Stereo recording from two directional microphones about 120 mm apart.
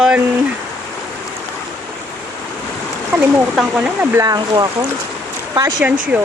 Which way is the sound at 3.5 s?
5° right (ahead or behind).